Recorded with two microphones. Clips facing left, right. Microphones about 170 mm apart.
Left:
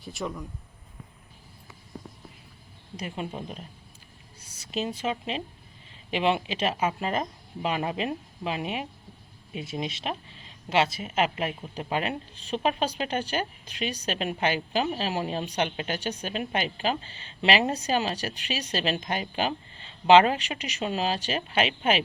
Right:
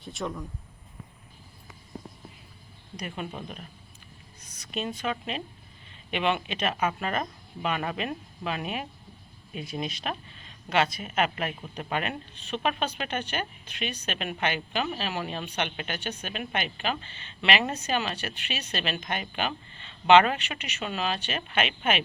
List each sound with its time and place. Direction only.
0.0 s speech: centre (ahead or behind)
2.9 s speech: 25° left (ahead or behind)